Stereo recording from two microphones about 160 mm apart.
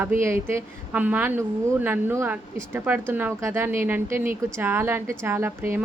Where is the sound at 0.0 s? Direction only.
15° right (ahead or behind).